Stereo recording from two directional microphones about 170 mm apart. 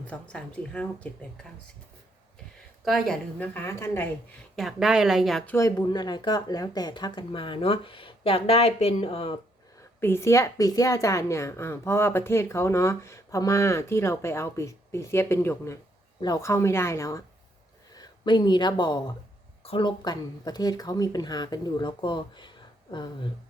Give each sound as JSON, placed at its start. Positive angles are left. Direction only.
{"t": 0.0, "sound": "a woman's voice", "side_deg": 5}
{"t": 2.8, "sound": "a woman's voice", "side_deg": 0}
{"t": 4.5, "sound": "speech", "side_deg": 0}
{"t": 5.5, "sound": "speech", "side_deg": 15}
{"t": 10.0, "sound": "a woman's voice", "side_deg": 15}